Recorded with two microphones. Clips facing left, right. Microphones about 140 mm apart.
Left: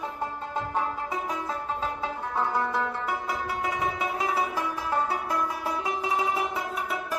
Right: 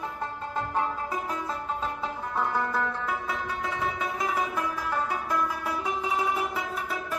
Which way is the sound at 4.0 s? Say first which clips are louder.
Left 1 dB; 30° left (ahead or behind).